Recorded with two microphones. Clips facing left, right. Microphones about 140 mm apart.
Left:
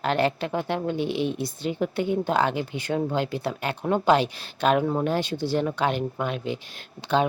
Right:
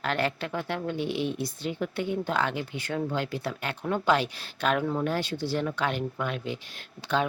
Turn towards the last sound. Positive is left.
turn(degrees=25)  # may be behind; listen again after turning